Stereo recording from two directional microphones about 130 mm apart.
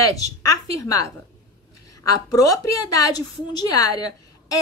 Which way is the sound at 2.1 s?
25° left (ahead or behind).